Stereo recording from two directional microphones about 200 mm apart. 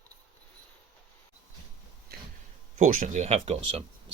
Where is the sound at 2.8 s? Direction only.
40° right (ahead or behind).